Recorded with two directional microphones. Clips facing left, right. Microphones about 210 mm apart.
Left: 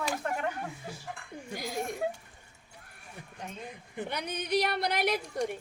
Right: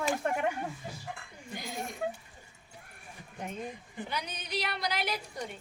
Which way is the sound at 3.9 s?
55° left (ahead or behind).